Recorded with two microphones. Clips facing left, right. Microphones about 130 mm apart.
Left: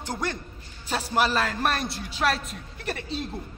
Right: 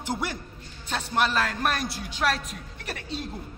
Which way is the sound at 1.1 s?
5° left (ahead or behind).